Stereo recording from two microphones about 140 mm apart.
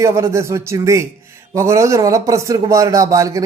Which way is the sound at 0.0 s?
20° right (ahead or behind).